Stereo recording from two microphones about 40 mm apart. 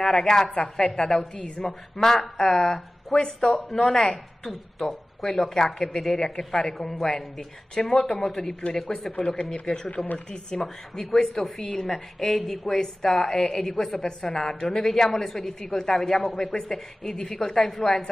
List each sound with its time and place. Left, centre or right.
0.0 s speech: centre
9.1 s speech: left